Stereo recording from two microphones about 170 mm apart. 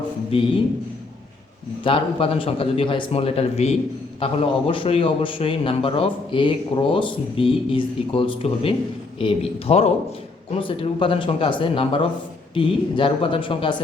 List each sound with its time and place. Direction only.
1.8 s a man's voice: 30° left (ahead or behind)